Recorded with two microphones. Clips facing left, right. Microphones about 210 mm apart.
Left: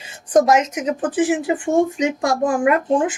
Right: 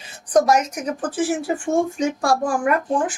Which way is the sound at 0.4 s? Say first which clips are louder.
Left 2 dB; 25° left (ahead or behind).